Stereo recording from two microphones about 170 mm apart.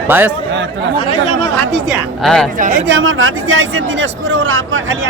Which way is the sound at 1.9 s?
Centre (ahead or behind).